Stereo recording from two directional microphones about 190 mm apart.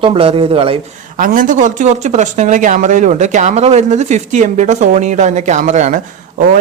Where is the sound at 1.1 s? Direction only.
45° right (ahead or behind).